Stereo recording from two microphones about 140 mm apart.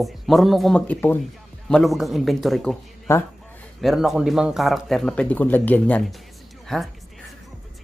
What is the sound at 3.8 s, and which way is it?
Speech, centre (ahead or behind).